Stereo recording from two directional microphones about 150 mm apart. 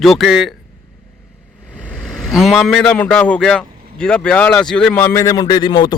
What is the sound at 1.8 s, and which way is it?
A man's voice, 5° left (ahead or behind).